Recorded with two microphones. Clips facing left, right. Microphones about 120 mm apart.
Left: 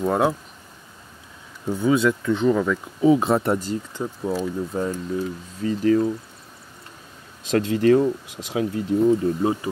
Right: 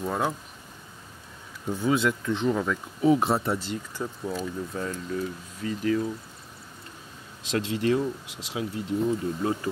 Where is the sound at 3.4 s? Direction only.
45° left (ahead or behind).